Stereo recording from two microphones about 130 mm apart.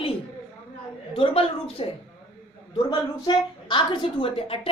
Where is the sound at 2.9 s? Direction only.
40° left (ahead or behind).